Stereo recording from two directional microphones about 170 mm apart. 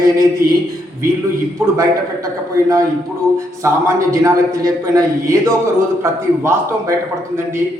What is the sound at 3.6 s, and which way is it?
A man's voice, 20° right (ahead or behind).